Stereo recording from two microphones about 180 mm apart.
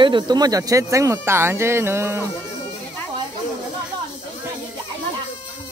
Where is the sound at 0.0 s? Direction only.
25° right (ahead or behind).